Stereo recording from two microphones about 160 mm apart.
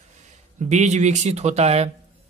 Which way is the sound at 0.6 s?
45° right (ahead or behind).